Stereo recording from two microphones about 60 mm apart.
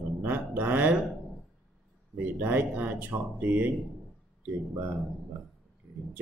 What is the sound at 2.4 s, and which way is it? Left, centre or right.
Speech, right.